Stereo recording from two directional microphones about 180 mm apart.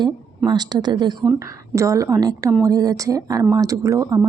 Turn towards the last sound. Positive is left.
turn(degrees=-20)  # may be behind; listen again after turning